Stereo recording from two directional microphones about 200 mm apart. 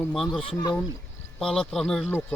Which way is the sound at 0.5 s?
20° left (ahead or behind).